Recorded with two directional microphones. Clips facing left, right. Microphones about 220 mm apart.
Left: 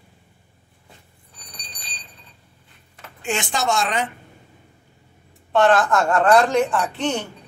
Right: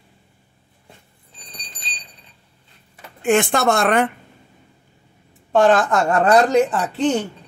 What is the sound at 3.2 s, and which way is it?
Speech, 55° right (ahead or behind).